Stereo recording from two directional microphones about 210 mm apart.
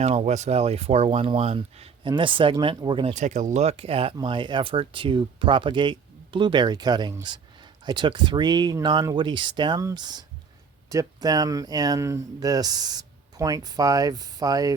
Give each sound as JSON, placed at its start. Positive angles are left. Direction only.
{"t": 0.0, "sound": "speech", "side_deg": -30}